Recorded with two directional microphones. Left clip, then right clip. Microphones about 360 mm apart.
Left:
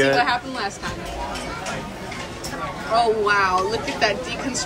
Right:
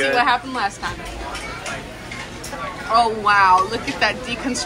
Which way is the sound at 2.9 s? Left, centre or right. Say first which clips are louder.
Right 2 dB; centre.